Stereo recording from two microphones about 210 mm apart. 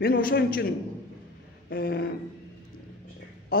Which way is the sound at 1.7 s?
50° left (ahead or behind).